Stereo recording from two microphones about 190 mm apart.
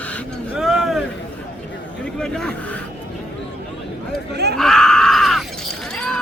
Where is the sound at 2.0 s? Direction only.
5° left (ahead or behind).